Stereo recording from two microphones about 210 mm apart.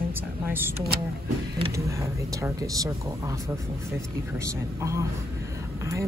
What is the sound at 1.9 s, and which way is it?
Speech, 15° right (ahead or behind).